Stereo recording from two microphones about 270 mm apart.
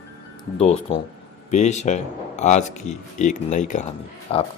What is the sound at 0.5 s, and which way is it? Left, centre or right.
Speech, left.